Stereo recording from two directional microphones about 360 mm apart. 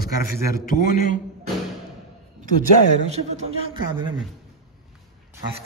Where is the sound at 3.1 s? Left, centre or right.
Centre.